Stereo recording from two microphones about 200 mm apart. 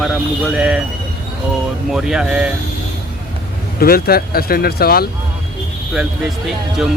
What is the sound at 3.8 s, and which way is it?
Speech, 50° left (ahead or behind).